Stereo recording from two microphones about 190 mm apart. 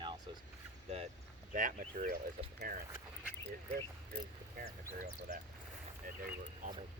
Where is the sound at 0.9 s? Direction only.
35° right (ahead or behind).